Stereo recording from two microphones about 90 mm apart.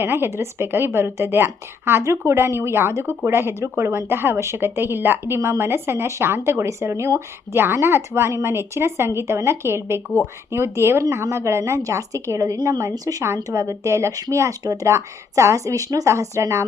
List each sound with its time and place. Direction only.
0.0 s a woman's voice: 25° right (ahead or behind)
13.2 s speech: 30° right (ahead or behind)